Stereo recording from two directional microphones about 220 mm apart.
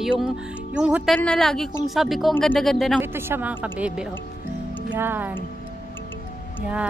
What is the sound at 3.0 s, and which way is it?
A woman's voice, 10° right (ahead or behind).